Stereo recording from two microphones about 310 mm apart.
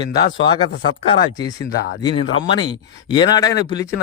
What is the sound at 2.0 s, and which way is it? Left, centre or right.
Speech, centre.